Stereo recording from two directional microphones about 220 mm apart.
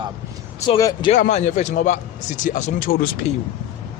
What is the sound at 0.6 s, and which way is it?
Speech, 20° left (ahead or behind).